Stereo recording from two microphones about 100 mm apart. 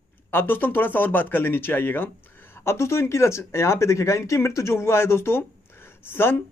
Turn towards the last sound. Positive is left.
turn(degrees=25)  # may be behind; listen again after turning